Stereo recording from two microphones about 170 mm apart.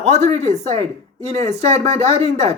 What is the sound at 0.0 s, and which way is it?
Speech, 40° right (ahead or behind).